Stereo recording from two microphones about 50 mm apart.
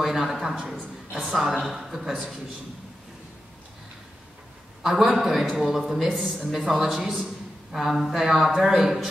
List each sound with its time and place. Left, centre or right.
0.0 s a man's voice: centre
4.8 s a man's voice: centre
6.5 s a man's voice: centre